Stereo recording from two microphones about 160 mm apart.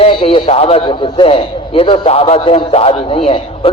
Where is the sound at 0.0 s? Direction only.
35° left (ahead or behind).